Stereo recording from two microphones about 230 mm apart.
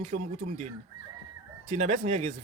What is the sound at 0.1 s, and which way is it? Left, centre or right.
Speech, right.